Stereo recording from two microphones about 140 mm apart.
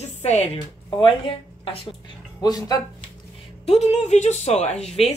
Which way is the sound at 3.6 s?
50° left (ahead or behind).